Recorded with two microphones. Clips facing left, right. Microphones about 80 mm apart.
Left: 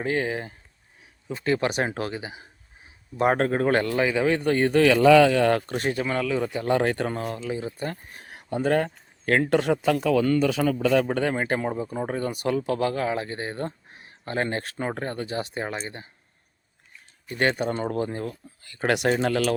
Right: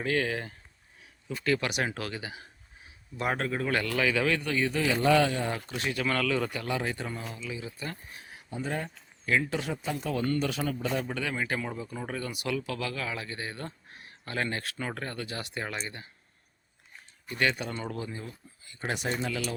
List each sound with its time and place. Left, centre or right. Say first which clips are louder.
0.0 s speech: left 3 dB; left
3.2 s speech: left 9 dB; left
4.4 s speech: left 9 dB; left
5.7 s speech: left 7 dB; left
6.0 s speech: even; centre
6.7 s speech: left 9 dB; left
7.5 s speech: left 8 dB; left
8.3 s a sound: left 11 dB; left
9.2 s speech: left 8 dB; left
11.0 s speech: left 8 dB; left
13.8 s speech: left 7 dB; left
17.3 s speech: left 6 dB; left
18.6 s speech: left 10 dB; left